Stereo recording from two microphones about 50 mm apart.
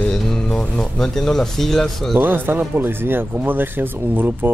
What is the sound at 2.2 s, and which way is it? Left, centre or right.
Speech, right.